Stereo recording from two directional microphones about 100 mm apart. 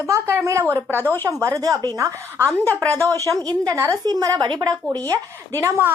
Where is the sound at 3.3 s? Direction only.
35° right (ahead or behind).